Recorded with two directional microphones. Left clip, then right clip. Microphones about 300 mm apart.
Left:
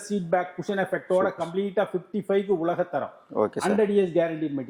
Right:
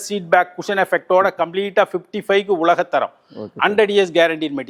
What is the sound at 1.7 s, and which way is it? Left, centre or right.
Speech, centre.